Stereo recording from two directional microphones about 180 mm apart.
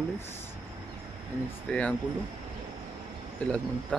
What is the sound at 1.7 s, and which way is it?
Speech, 10° left (ahead or behind).